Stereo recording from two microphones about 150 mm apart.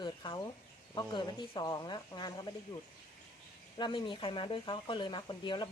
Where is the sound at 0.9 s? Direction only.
30° left (ahead or behind).